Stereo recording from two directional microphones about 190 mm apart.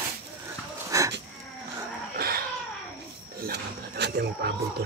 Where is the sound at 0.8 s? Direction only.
15° right (ahead or behind).